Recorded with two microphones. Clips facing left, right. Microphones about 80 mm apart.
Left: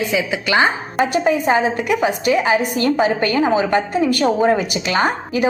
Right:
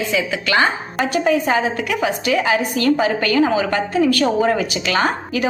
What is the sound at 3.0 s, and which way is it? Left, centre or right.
A woman's voice, left.